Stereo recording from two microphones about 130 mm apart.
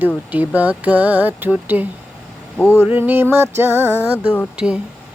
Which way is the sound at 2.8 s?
15° right (ahead or behind).